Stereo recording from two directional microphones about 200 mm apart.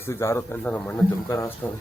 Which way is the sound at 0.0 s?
15° left (ahead or behind).